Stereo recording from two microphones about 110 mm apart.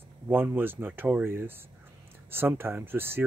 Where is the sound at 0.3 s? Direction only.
20° right (ahead or behind).